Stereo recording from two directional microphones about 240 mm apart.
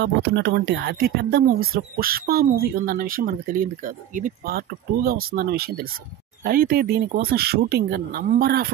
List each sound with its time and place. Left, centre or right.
0.0 s speech: right